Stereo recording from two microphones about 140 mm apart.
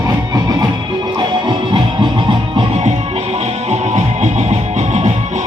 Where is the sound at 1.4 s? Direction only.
35° right (ahead or behind).